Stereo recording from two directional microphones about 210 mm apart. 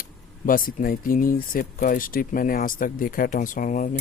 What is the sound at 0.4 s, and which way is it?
Speech, 40° left (ahead or behind).